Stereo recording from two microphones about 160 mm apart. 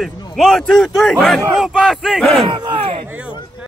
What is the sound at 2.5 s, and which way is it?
Speech, 30° right (ahead or behind).